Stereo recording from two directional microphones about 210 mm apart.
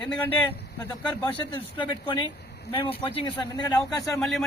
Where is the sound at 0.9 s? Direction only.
20° left (ahead or behind).